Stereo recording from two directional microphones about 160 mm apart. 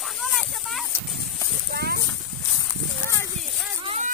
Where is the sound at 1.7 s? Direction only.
80° right.